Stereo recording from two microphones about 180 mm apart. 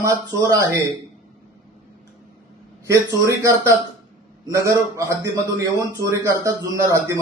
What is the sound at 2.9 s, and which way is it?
Speech, 15° right (ahead or behind).